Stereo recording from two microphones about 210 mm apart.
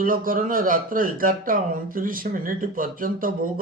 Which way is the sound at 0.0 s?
40° right (ahead or behind).